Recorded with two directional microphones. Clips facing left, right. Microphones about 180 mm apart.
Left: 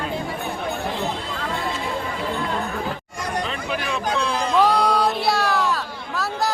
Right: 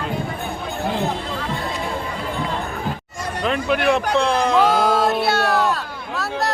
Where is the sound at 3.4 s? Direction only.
60° right (ahead or behind).